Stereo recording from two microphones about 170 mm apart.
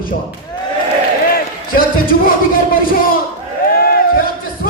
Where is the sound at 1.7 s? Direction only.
55° left (ahead or behind).